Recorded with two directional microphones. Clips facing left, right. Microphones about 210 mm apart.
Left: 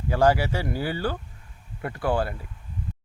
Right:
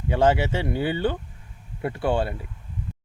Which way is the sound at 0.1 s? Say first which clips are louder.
Right 1 dB; 25° right (ahead or behind).